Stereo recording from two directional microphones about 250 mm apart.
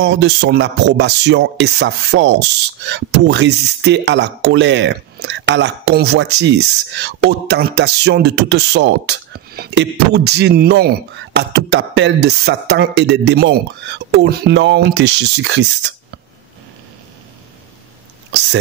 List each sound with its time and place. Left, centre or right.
0.0 s speech: right